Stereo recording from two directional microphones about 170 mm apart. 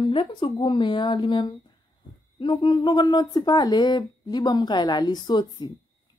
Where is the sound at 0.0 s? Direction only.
30° left (ahead or behind).